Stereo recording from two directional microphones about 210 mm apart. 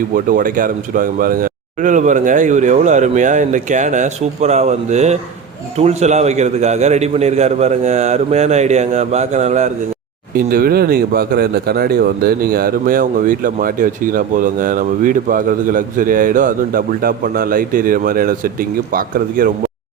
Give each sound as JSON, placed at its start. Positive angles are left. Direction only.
{"t": 0.1, "sound": "speech", "side_deg": -40}
{"t": 10.3, "sound": "speech", "side_deg": -45}